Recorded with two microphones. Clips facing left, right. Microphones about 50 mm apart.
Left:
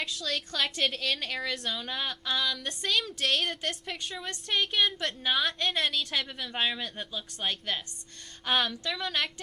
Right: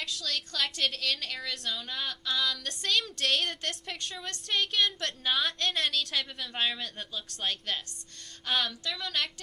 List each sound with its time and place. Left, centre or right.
0.0 s a woman's voice: centre
2.4 s a woman's voice: centre
8.8 s speech: left